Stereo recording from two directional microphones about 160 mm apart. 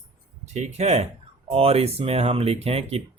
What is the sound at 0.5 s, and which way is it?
Speech, 45° right (ahead or behind).